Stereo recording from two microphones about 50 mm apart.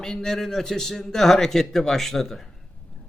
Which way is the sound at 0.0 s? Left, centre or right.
Centre.